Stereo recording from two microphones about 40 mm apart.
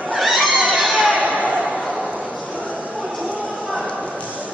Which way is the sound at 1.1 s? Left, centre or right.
Right.